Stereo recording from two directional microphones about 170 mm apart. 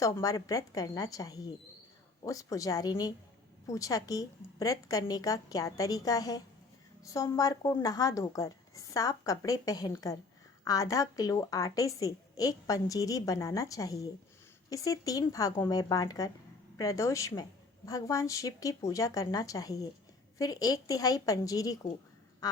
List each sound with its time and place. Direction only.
0.0 s a woman's voice: 20° left (ahead or behind)